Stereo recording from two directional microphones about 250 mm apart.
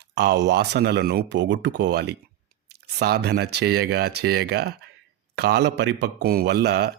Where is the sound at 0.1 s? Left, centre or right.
Right.